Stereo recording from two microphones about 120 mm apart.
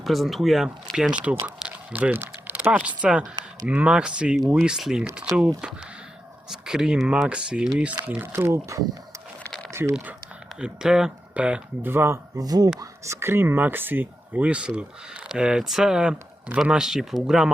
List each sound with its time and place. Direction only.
0.0 s speech: centre (ahead or behind)
6.5 s speech: 5° right (ahead or behind); by 9.9 s 20° right (ahead or behind)
10.6 s speech: 5° right (ahead or behind); by 12.7 s 35° right (ahead or behind)
12.8 s speech: 20° right (ahead or behind); by 17.5 s 5° right (ahead or behind)